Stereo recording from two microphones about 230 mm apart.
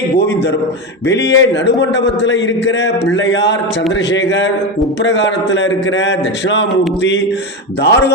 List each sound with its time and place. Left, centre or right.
1.0 s a man's voice: left